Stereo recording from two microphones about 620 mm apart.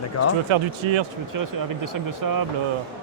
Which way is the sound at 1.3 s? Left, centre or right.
Right.